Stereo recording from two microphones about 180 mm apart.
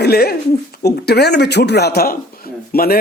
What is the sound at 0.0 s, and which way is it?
Speech, 60° left (ahead or behind).